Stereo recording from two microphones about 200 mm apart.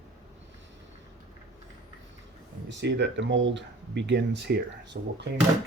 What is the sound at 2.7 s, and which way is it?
Speech, 60° right (ahead or behind).